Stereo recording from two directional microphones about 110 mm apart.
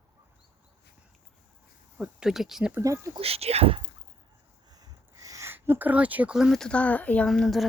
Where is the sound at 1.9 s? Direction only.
5° right (ahead or behind).